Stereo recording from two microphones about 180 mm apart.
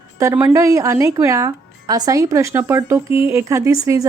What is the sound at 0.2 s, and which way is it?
Speech, 15° right (ahead or behind).